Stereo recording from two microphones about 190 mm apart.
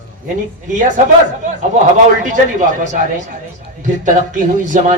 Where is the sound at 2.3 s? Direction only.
40° right (ahead or behind).